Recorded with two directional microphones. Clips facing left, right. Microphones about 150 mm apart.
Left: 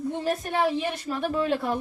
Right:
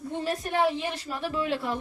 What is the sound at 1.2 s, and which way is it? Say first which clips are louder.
Speech: left 3 dB; 50° left (ahead or behind).